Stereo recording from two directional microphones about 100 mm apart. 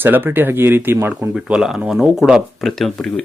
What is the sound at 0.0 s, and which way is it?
Speech, 20° right (ahead or behind).